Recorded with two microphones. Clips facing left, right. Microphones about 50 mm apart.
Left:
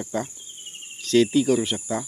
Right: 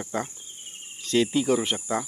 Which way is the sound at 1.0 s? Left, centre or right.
Centre.